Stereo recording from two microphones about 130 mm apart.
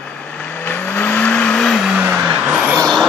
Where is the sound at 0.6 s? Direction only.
15° left (ahead or behind); by 2.7 s 5° right (ahead or behind).